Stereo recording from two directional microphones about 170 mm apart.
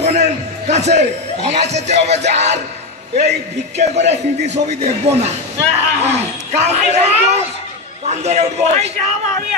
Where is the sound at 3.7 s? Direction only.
40° right (ahead or behind).